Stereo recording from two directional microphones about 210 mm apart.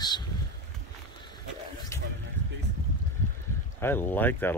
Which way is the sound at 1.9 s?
15° left (ahead or behind).